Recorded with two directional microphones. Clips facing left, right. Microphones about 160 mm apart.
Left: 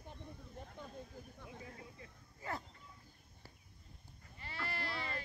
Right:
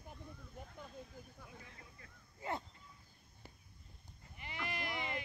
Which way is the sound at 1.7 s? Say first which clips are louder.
Left 6 dB; 25° left (ahead or behind).